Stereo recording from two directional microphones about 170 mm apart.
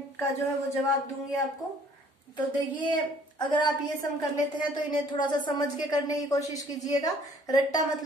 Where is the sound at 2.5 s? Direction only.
25° left (ahead or behind).